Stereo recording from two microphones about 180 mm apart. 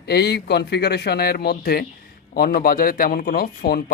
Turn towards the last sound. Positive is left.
turn(degrees=60)  # may be behind; listen again after turning